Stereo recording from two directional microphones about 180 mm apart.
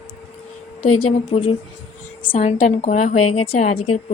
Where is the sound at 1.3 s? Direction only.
35° left (ahead or behind).